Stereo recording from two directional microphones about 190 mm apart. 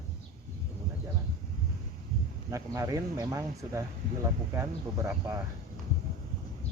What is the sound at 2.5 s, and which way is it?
Speech, 15° right (ahead or behind).